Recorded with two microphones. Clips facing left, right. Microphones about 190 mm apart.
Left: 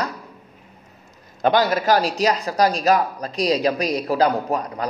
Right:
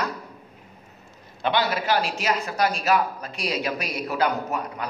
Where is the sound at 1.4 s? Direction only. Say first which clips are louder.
Left 6 dB; 40° left (ahead or behind).